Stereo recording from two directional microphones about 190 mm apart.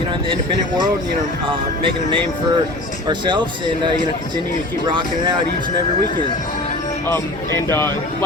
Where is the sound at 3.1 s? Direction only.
25° right (ahead or behind).